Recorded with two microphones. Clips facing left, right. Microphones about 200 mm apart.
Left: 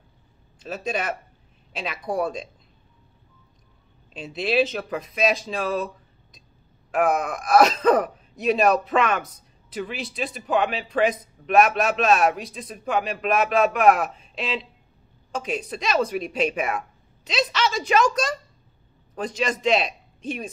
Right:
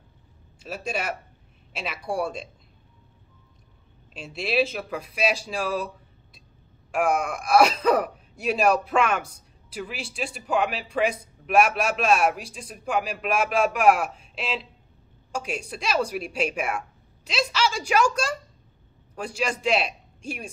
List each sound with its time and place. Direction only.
0.7 s speech: centre (ahead or behind)
2.1 s speech: 10° right (ahead or behind)
4.4 s speech: centre (ahead or behind)
6.9 s speech: 5° right (ahead or behind)
19.1 s a man's voice: 10° right (ahead or behind)